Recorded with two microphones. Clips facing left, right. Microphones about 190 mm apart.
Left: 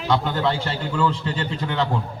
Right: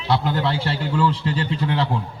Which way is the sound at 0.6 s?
35° right (ahead or behind).